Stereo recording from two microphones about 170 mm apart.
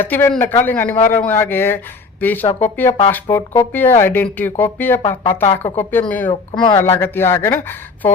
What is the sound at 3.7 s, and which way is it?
Speech, 10° left (ahead or behind).